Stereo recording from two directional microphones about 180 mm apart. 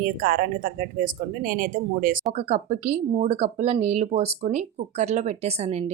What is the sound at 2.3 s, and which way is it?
Speech, 40° right (ahead or behind).